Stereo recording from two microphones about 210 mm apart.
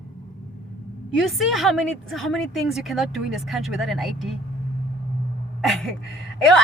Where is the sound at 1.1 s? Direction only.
Centre (ahead or behind).